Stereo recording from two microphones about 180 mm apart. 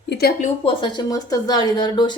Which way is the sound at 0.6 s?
30° left (ahead or behind).